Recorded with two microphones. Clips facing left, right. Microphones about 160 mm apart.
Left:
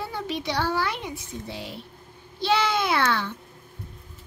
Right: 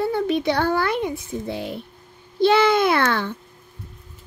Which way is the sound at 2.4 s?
55° right (ahead or behind).